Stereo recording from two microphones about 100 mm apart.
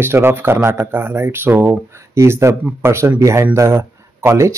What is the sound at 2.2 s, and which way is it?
Speech, 30° right (ahead or behind).